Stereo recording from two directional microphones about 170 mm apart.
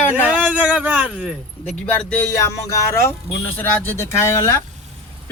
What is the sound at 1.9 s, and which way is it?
Speech, 10° left (ahead or behind).